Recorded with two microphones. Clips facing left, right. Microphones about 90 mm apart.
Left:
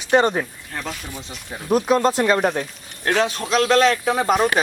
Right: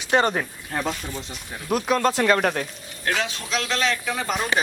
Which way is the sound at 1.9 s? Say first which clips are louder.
Left 1 dB; 20° left (ahead or behind).